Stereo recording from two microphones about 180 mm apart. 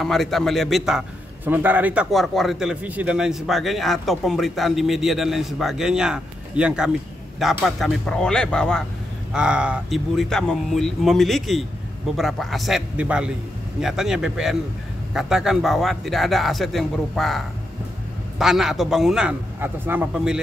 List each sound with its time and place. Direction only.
0.0 s a man's voice: centre (ahead or behind)
18.4 s a man's voice: centre (ahead or behind)